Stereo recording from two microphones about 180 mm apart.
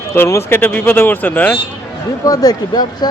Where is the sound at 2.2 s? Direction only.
20° left (ahead or behind).